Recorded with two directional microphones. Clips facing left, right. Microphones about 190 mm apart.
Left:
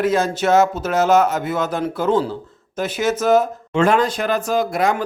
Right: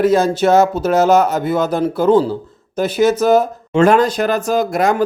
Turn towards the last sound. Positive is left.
turn(degrees=-45)  # may be behind; listen again after turning